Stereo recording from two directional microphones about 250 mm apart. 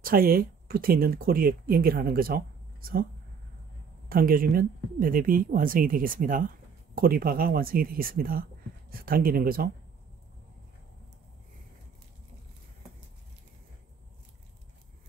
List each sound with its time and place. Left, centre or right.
0.0 s speech: right
4.1 s speech: right